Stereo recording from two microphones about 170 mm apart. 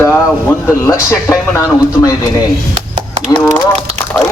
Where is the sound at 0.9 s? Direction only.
20° left (ahead or behind).